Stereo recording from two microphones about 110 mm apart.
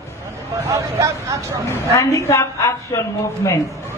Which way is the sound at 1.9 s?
30° left (ahead or behind).